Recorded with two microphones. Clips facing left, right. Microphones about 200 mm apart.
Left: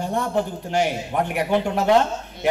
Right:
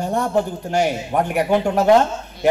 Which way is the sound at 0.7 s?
45° right (ahead or behind).